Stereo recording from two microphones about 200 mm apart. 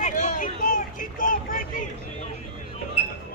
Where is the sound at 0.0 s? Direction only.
40° left (ahead or behind).